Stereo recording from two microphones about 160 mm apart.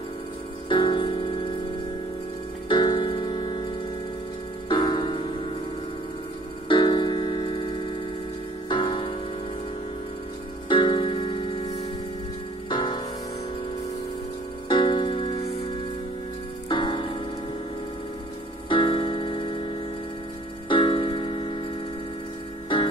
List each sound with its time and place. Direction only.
0.7 s music: 30° left (ahead or behind)
2.7 s music: 30° left (ahead or behind)
4.6 s music: 30° left (ahead or behind)
6.7 s music: 30° left (ahead or behind)
10.7 s music: 30° left (ahead or behind)
14.7 s music: 30° left (ahead or behind)
16.6 s music: 30° left (ahead or behind)
18.7 s music: 30° left (ahead or behind)